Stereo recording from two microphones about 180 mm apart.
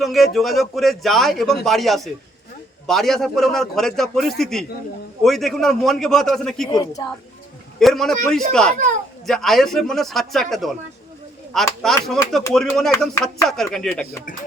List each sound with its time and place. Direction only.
0.0 s a man's voice: centre (ahead or behind)
6.7 s a woman's voice: 20° left (ahead or behind)
7.8 s a man's voice: centre (ahead or behind)